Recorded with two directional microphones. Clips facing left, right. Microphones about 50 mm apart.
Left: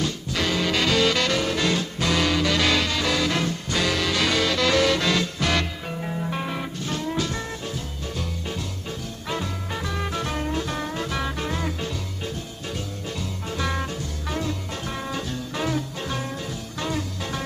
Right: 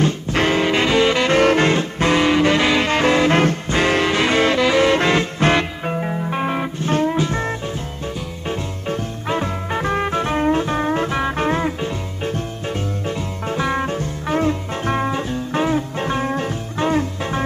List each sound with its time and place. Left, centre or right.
0.0 s music: right
1.4 s saxophone: right
2.9 s music: right
8.5 s swing music: right
11.3 s music: right